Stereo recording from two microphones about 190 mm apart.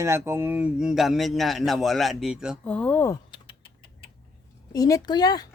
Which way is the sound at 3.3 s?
25° left (ahead or behind).